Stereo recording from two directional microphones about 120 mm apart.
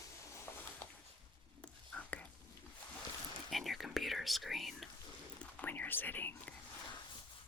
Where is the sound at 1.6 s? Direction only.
10° left (ahead or behind).